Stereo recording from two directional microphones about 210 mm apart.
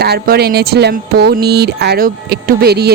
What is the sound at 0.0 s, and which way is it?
Speech, 50° right (ahead or behind).